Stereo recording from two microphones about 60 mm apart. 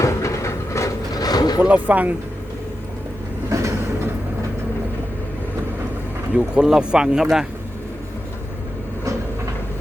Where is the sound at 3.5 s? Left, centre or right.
Right.